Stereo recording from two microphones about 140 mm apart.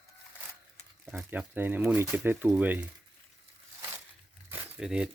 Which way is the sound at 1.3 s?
15° right (ahead or behind).